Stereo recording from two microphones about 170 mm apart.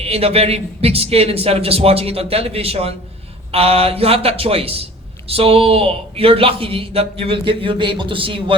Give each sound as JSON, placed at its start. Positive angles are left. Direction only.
{"t": 0.0, "sound": "a man's voice", "side_deg": -35}